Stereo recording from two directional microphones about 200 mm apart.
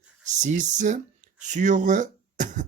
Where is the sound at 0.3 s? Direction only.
35° right (ahead or behind).